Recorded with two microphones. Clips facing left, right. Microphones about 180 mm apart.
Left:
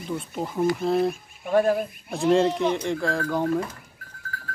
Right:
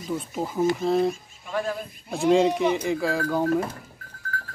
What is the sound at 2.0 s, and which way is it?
Speech, centre (ahead or behind).